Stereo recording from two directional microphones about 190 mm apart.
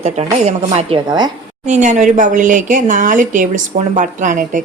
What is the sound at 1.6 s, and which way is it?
A woman's voice, 40° right (ahead or behind).